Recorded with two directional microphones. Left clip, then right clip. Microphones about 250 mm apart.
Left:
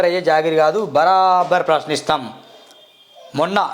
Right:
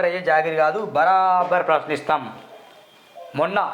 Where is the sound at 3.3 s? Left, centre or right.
Left.